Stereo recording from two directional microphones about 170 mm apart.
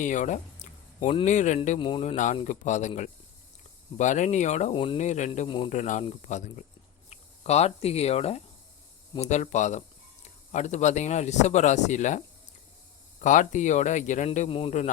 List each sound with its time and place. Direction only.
0.0 s speech: 45° left (ahead or behind)
1.8 s speech: 30° left (ahead or behind)
4.7 s speech: 30° left (ahead or behind)
5.0 s speech: 45° left (ahead or behind)
5.5 s speech: 30° left (ahead or behind)
5.7 s speech: 45° left (ahead or behind)
13.2 s speech: 45° left (ahead or behind)